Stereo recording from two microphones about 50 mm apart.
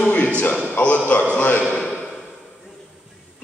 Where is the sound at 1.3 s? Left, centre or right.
Left.